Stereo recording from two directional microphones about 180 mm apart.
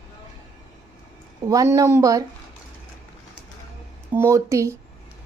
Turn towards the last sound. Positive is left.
turn(degrees=-15)  # may be behind; listen again after turning